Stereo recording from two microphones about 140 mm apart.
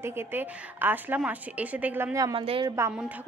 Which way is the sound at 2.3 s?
40° right (ahead or behind).